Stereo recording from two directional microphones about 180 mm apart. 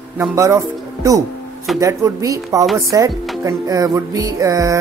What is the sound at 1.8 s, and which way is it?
Speech, 15° right (ahead or behind).